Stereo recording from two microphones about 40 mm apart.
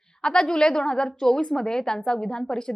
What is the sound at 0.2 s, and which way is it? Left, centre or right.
A woman's voice, centre.